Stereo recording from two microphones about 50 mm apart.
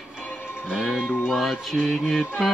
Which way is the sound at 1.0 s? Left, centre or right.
Left.